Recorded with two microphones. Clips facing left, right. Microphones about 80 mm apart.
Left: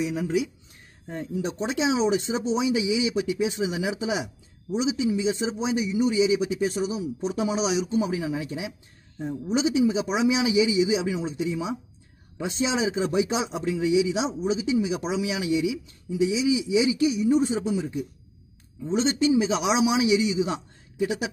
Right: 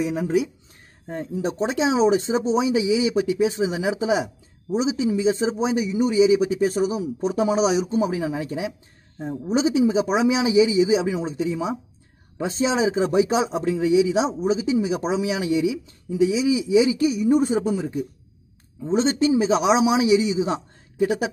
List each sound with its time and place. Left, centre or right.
0.0 s speech: right